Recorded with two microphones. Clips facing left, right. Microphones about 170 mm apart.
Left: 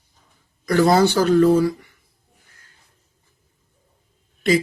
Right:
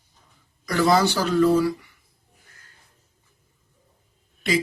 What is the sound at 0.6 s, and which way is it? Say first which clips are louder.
Speech: left 4 dB; 50° left (ahead or behind).